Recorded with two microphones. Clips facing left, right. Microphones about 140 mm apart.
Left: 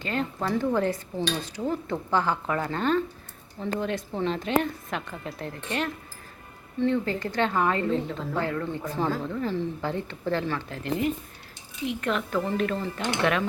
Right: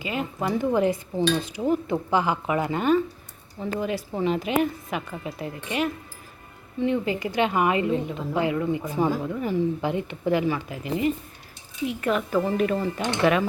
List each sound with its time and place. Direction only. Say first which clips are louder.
0.0 s a woman's voice: right 1 dB; 10° right (ahead or behind)